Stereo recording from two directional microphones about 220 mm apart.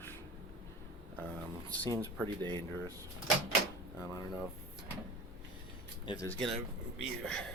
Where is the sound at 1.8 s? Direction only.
20° right (ahead or behind).